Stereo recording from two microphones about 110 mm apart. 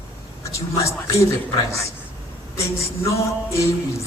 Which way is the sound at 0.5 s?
30° left (ahead or behind).